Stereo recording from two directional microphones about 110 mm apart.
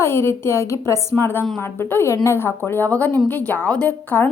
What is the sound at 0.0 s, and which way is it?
A woman's voice, 20° left (ahead or behind).